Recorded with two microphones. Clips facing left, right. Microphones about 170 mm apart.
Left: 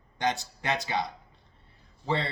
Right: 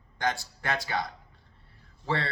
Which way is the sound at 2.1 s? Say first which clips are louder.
Left 1 dB; 20° left (ahead or behind).